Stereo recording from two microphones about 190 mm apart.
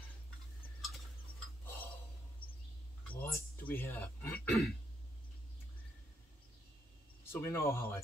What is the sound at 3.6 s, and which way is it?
Speech, 10° left (ahead or behind).